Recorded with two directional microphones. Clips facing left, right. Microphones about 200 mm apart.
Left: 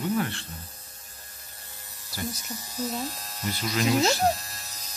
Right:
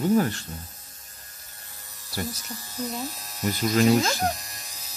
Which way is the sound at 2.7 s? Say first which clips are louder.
Even; centre (ahead or behind).